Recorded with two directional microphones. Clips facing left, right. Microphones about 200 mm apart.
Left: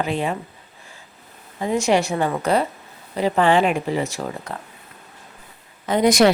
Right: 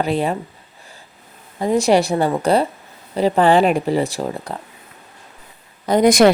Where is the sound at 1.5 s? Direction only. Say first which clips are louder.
Right 4 dB; 35° right (ahead or behind).